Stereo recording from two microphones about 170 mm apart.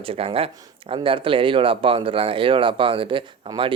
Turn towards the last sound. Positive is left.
turn(degrees=-30)  # may be behind; listen again after turning